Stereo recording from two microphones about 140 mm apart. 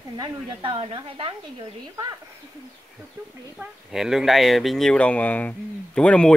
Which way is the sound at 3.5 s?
5° right (ahead or behind).